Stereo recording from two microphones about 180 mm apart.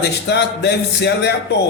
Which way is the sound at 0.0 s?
70° left (ahead or behind).